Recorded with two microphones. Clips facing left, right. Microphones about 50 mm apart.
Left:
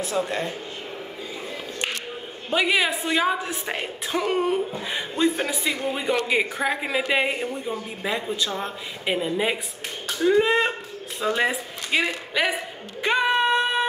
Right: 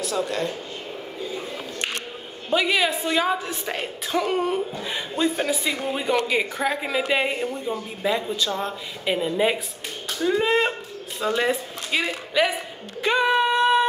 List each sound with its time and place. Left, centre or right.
0.0 s speech: left
2.5 s a woman's voice: centre
9.1 s speech: centre
11.1 s speech: centre
13.0 s a sound: centre